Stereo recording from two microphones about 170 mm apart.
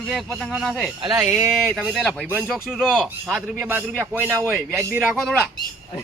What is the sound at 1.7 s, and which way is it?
Speech, centre (ahead or behind).